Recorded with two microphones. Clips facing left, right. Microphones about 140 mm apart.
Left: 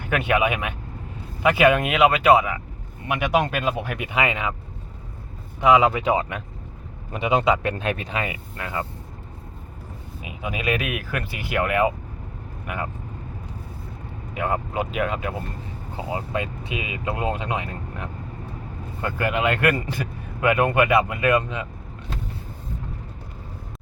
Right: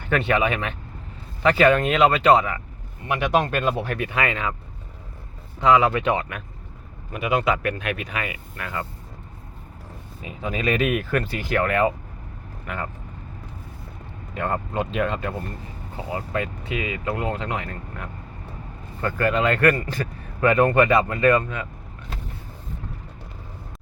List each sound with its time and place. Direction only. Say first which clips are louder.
0.0 s a man's voice: even; 10° left (ahead or behind)
5.5 s a man's voice: left 1 dB; 15° left (ahead or behind)
10.2 s a man's voice: right 2 dB; 10° left (ahead or behind)
14.3 s a man's voice: even; 10° left (ahead or behind)
16.0 s a man's voice: even; 20° left (ahead or behind)